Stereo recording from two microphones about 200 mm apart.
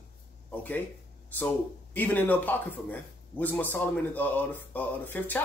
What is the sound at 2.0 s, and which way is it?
Speech, 10° left (ahead or behind).